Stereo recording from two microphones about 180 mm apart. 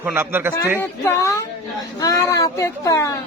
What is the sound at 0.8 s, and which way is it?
Speech, 15° left (ahead or behind).